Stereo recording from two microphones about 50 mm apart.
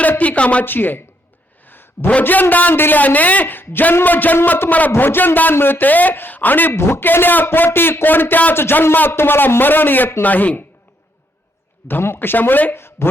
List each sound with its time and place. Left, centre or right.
0.2 s a woman's voice: left
0.6 s a man's voice: left
1.6 s a sound: left
2.2 s a man's voice: left
5.8 s a man's voice: left
6.7 s a man's voice: left
7.0 s a man's voice: left
10.2 s a man's voice: left
11.9 s a man's voice: left
12.7 s speech: left